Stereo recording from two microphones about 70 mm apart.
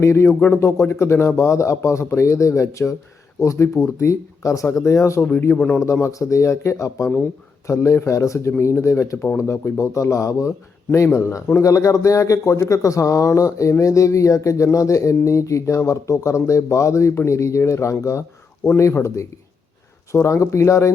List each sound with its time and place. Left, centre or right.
0.0 s speech: left
5.2 s speech: left
5.8 s speech: left
11.6 s speech: left